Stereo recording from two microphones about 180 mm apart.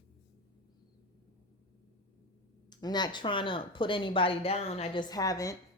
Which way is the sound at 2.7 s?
25° left (ahead or behind).